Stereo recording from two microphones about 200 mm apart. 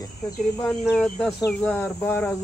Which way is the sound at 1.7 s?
10° left (ahead or behind).